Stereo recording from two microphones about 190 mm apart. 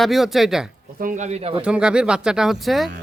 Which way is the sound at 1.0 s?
40° right (ahead or behind).